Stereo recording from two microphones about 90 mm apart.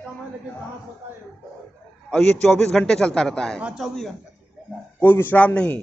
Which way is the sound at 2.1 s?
5° left (ahead or behind).